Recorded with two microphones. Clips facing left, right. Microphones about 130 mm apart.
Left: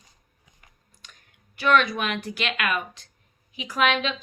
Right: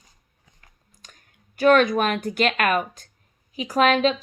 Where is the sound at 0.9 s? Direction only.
40° right (ahead or behind).